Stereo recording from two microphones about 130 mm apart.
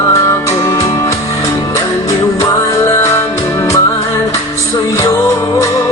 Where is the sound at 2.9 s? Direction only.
20° left (ahead or behind).